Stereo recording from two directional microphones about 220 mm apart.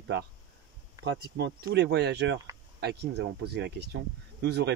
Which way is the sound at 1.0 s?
50° right (ahead or behind).